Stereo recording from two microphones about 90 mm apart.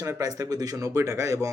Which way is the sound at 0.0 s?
35° right (ahead or behind).